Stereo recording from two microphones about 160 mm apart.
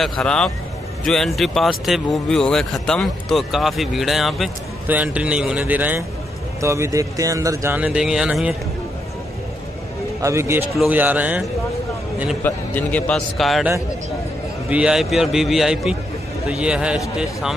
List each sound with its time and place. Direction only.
0.0 s speech: 5° left (ahead or behind)
10.2 s speech: 15° right (ahead or behind)
12.4 s a man's voice: 10° left (ahead or behind)
14.7 s speech: 5° right (ahead or behind)